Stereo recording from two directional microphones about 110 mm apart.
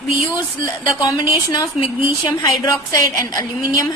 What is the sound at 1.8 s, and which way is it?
Speech, 55° left (ahead or behind).